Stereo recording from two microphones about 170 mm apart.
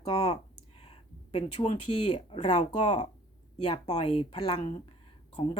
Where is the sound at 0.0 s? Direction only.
35° left (ahead or behind).